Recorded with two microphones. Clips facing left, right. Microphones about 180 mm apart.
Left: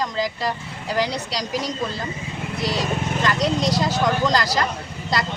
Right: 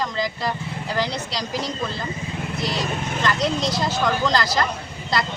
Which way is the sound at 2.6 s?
35° left (ahead or behind).